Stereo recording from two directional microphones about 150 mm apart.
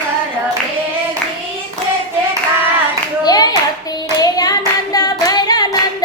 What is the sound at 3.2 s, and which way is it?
Clapping, 25° left (ahead or behind).